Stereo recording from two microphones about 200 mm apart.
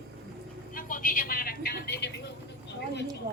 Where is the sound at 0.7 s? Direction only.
45° left (ahead or behind).